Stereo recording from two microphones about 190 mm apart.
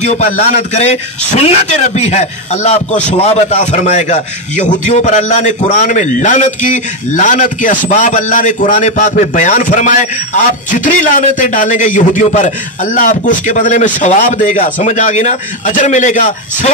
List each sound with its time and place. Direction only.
0.0 s a man's voice: 35° left (ahead or behind)